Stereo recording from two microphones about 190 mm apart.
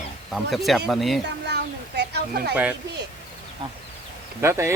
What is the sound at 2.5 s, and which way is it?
Speech, 10° right (ahead or behind).